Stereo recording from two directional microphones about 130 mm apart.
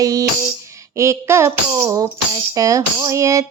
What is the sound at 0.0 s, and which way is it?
Tambourine, 25° right (ahead or behind).